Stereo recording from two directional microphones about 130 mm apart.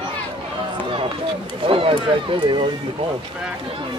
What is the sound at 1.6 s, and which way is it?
Speech, 45° right (ahead or behind).